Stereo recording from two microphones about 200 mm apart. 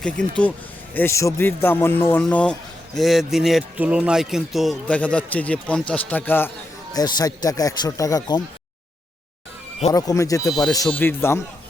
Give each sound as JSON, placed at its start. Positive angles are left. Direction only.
{"t": 0.0, "sound": "a man's voice", "side_deg": 5}
{"t": 9.9, "sound": "a man's voice", "side_deg": 15}